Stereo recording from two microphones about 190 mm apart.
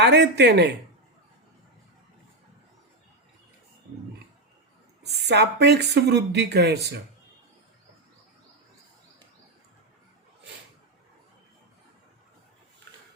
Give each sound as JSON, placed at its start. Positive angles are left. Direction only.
{"t": 0.0, "sound": "speech", "side_deg": -65}
{"t": 5.2, "sound": "speech", "side_deg": -65}